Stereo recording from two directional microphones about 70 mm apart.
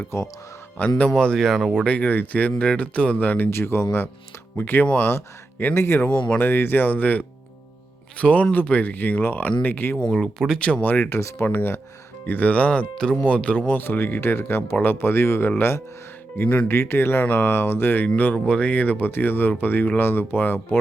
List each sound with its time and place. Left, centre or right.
0.8 s speech: centre
1.9 s speech: left
3.5 s speech: left
6.1 s speech: centre
6.4 s speech: left
10.9 s speech: left
11.2 s speech: left
11.4 s speech: left
18.3 s speech: centre